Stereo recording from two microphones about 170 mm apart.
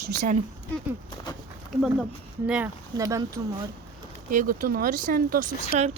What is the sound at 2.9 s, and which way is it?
Speech, 20° right (ahead or behind).